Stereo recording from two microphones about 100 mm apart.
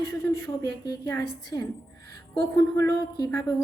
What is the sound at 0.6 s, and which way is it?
A woman's voice, 35° left (ahead or behind).